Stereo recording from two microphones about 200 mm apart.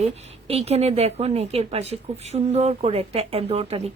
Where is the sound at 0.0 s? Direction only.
30° right (ahead or behind).